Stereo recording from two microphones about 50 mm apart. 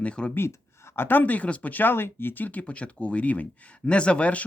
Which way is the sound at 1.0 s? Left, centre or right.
Left.